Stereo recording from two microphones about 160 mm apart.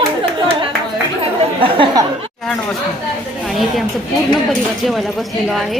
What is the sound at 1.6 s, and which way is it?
Speech, 30° right (ahead or behind).